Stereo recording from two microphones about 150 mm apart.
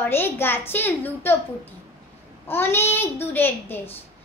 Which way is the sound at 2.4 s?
15° left (ahead or behind).